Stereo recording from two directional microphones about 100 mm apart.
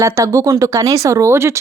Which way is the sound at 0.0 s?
30° right (ahead or behind).